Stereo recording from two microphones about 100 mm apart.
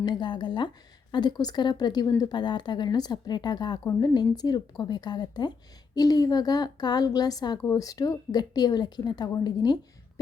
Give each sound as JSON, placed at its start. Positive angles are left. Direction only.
{"t": 0.0, "sound": "a woman's voice", "side_deg": 50}